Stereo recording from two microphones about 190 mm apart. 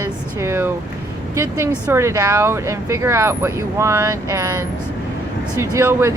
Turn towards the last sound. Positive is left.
turn(degrees=-15)  # may be behind; listen again after turning